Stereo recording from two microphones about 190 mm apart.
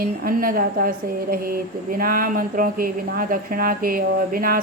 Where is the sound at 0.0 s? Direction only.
50° right (ahead or behind).